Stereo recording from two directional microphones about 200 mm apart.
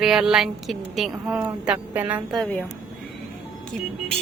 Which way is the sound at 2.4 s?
5° left (ahead or behind).